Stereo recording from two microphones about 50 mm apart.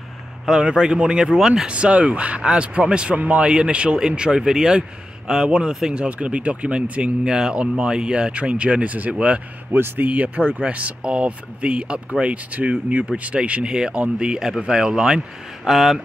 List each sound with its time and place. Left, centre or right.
0.5 s speech: centre
1.7 s speech: right
6.0 s speech: right
9.7 s speech: right; by 16.0 s centre